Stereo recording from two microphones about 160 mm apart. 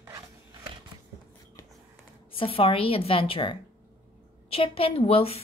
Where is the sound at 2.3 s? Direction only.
35° left (ahead or behind).